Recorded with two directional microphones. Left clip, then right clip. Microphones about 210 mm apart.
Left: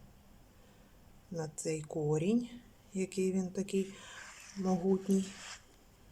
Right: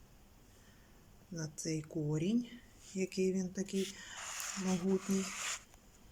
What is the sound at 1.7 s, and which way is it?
Speech, 20° left (ahead or behind).